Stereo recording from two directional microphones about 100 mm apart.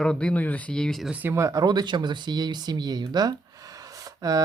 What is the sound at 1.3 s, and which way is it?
Speech, 35° right (ahead or behind).